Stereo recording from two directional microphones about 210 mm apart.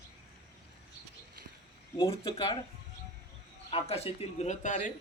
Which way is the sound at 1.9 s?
25° left (ahead or behind).